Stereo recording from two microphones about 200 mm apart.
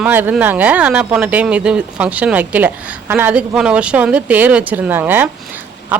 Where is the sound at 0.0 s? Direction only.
10° right (ahead or behind).